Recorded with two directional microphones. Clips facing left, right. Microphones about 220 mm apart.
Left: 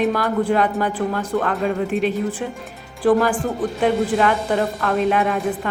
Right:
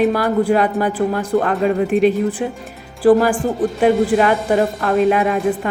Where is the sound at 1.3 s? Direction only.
35° right (ahead or behind).